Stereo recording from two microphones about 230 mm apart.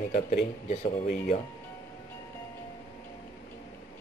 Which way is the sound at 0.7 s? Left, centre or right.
Left.